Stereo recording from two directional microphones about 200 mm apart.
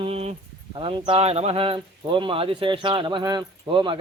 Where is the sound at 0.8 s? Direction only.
25° right (ahead or behind).